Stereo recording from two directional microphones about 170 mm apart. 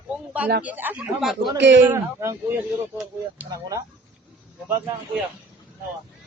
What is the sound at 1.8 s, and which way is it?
A child's voice, 15° right (ahead or behind).